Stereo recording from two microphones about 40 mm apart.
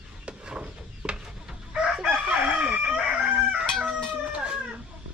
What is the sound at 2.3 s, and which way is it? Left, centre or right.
Chicken, right.